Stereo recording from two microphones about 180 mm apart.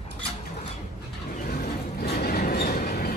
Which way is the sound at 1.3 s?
55° left (ahead or behind).